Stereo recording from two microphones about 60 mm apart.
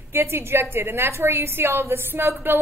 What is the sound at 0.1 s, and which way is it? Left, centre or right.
A woman's voice, right.